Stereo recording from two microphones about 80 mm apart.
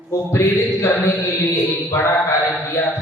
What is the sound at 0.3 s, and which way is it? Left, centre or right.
Music, left.